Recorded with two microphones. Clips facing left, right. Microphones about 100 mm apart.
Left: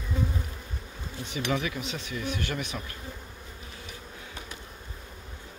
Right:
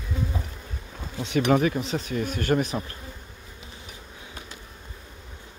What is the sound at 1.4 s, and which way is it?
Speech, 45° right (ahead or behind).